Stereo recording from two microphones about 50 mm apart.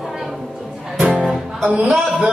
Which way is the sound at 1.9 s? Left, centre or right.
Centre.